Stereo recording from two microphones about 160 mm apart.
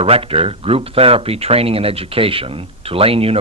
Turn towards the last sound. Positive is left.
turn(degrees=-35)  # may be behind; listen again after turning